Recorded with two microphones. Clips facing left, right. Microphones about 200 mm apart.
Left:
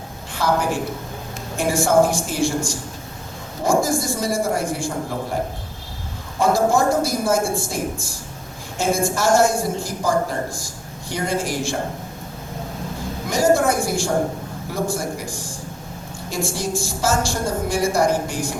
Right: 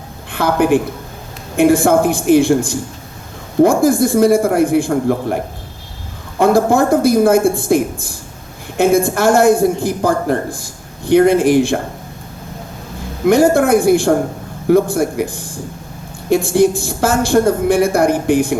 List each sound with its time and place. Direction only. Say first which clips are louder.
0.3 s a woman's voice: right 8 dB; 60° right (ahead or behind)
6.4 s a woman's voice: right 5 dB; 60° right (ahead or behind)
13.2 s a woman's voice: right 7 dB; 60° right (ahead or behind)